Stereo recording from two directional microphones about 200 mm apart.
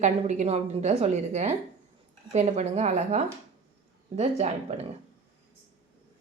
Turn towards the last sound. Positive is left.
turn(degrees=-30)  # may be behind; listen again after turning